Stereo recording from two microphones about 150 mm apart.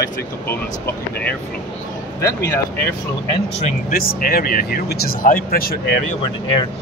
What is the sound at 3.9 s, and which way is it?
Speech, 75° left (ahead or behind).